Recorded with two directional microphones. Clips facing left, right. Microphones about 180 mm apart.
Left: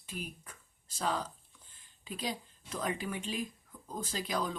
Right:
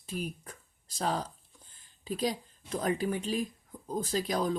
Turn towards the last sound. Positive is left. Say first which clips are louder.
# right 6 dB
turn(degrees=-40)  # may be behind; listen again after turning